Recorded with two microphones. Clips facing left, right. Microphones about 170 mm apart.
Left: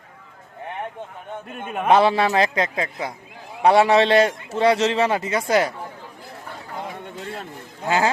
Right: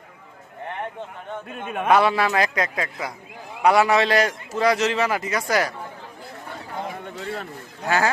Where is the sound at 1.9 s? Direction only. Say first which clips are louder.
Left 2 dB; 30° left (ahead or behind).